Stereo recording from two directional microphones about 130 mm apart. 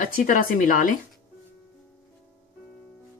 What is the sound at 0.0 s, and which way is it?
Speech, 90° left.